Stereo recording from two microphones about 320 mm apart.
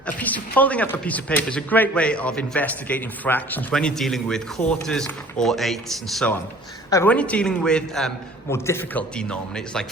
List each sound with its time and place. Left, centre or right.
0.2 s speech: centre